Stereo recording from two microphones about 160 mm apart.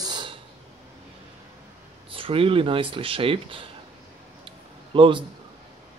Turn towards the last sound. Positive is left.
turn(degrees=-30)  # may be behind; listen again after turning